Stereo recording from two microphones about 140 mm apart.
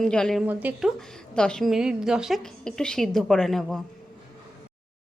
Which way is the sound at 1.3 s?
5° left (ahead or behind).